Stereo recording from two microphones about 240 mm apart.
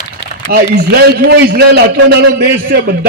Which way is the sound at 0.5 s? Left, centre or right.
Right.